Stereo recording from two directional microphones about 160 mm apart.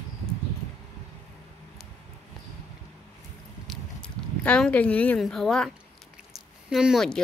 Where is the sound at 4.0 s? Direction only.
5° left (ahead or behind).